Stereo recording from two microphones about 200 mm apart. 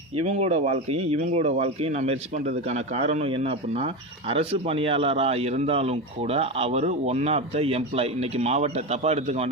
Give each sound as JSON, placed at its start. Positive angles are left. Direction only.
{"t": 0.3, "sound": "speech", "side_deg": -35}